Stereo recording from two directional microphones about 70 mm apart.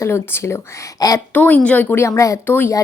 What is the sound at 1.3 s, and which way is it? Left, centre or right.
Speech, left.